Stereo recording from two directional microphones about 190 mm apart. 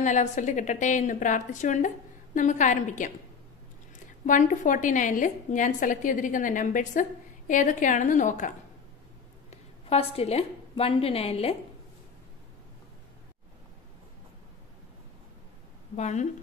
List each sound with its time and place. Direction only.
0.0 s a woman's voice: 40° left (ahead or behind)
4.3 s a woman's voice: 45° left (ahead or behind)
16.0 s a woman's voice: 35° left (ahead or behind)